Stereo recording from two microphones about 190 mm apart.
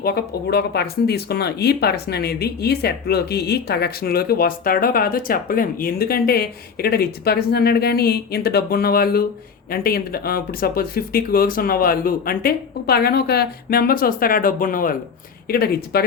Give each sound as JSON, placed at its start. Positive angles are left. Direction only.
{"t": 0.0, "sound": "speech", "side_deg": 55}